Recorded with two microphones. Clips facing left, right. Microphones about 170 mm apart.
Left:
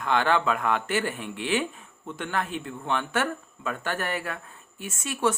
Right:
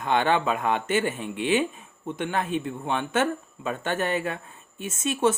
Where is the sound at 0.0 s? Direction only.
20° right (ahead or behind).